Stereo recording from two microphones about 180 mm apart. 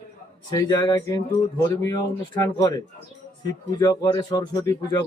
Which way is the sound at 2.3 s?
20° left (ahead or behind).